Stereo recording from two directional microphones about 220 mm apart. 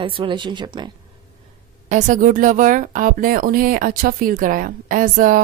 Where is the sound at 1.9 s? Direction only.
35° right (ahead or behind).